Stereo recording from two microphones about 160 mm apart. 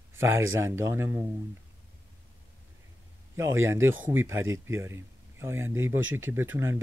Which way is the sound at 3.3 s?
15° right (ahead or behind).